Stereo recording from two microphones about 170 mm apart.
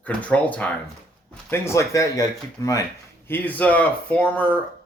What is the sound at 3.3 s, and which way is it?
Speech, 10° left (ahead or behind).